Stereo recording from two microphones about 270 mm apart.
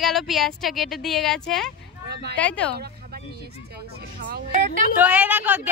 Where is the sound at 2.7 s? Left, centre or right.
Right.